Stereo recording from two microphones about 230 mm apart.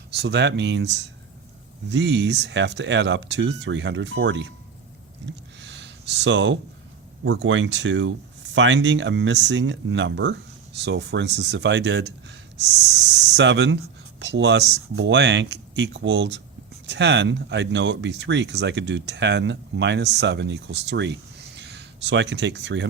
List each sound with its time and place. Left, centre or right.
0.2 s speech: right
5.5 s speech: right